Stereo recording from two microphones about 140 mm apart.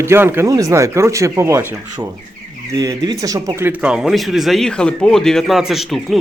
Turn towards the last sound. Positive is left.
turn(degrees=0)  # may be behind; listen again after turning